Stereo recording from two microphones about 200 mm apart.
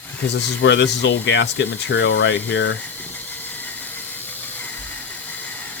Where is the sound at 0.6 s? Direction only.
60° left (ahead or behind).